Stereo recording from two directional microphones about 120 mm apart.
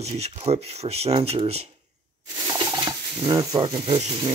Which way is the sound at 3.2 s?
30° right (ahead or behind).